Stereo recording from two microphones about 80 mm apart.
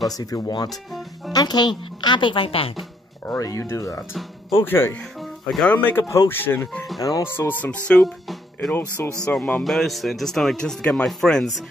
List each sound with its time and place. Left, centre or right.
0.2 s a woman's voice: left
3.3 s speech: left
6.0 s speech: left
6.3 s speech: left
7.0 s speech: left
7.2 s speech: left
7.9 s speech: centre
8.7 s speech: left
9.2 s speech: centre